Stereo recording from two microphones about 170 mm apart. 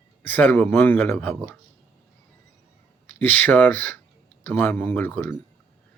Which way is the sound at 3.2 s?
10° left (ahead or behind).